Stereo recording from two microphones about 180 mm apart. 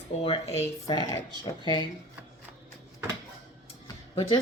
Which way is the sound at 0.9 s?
25° left (ahead or behind).